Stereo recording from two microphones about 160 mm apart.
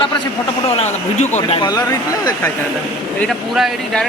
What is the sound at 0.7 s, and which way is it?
Speech, 45° left (ahead or behind).